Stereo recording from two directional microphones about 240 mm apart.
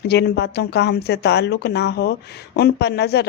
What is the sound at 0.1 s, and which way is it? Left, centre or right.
Speech, left.